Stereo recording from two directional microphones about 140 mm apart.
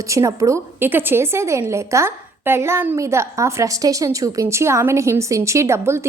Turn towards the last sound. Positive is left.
turn(degrees=-20)  # may be behind; listen again after turning